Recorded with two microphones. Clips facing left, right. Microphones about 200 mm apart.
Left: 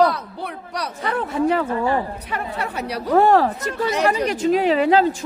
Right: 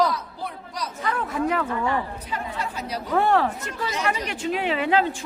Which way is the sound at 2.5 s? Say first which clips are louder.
Left 4 dB; 65° left (ahead or behind).